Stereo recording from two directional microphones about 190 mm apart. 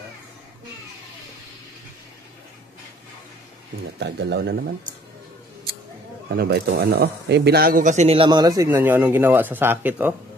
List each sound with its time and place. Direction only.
4.0 s a man's voice: 65° right (ahead or behind)
6.3 s speech: 55° right (ahead or behind); by 10.1 s 10° right (ahead or behind)